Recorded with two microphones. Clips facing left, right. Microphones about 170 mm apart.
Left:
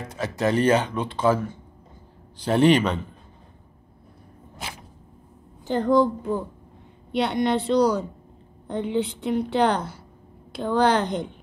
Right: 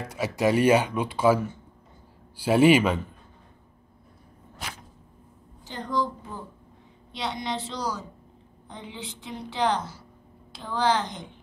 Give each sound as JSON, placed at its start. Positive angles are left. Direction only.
{"t": 0.1, "sound": "speech", "side_deg": -10}
{"t": 5.7, "sound": "a woman's voice", "side_deg": 55}
{"t": 7.1, "sound": "a woman's voice", "side_deg": 60}